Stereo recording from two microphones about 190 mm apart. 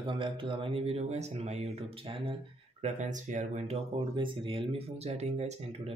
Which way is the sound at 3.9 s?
25° right (ahead or behind).